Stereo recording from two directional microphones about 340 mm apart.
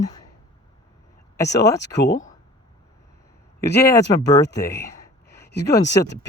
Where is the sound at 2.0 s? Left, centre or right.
Left.